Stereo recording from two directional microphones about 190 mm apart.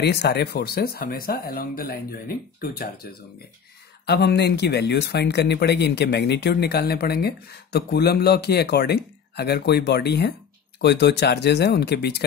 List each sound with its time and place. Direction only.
0.0 s speech: 60° left (ahead or behind)